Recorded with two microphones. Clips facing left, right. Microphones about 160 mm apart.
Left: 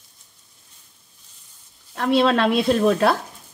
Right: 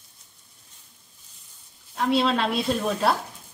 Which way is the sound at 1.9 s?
70° left (ahead or behind).